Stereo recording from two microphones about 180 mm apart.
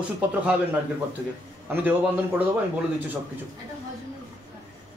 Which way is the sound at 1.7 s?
10° right (ahead or behind).